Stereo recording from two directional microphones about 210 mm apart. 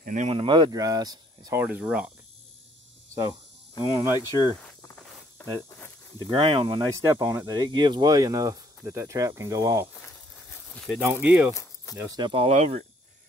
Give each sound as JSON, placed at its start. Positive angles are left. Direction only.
{"t": 0.0, "sound": "speech", "side_deg": -35}
{"t": 3.8, "sound": "speech", "side_deg": -10}
{"t": 6.1, "sound": "speech", "side_deg": -25}
{"t": 10.7, "sound": "speech", "side_deg": 0}
{"t": 11.5, "sound": "a sound", "side_deg": 15}
{"t": 12.0, "sound": "speech", "side_deg": -20}